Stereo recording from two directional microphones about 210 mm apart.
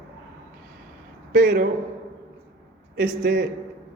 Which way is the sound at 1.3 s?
45° right (ahead or behind).